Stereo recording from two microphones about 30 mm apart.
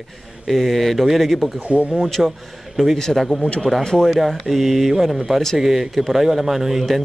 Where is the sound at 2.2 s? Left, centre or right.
Centre.